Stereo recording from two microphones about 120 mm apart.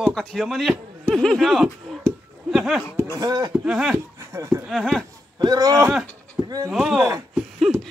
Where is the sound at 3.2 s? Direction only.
35° right (ahead or behind).